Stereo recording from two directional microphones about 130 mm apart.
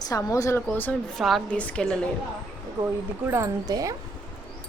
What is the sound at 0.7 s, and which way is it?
Speech, 15° left (ahead or behind).